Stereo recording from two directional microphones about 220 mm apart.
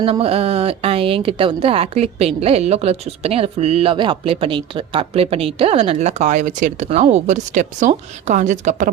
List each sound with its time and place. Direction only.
0.0 s speech: 25° right (ahead or behind)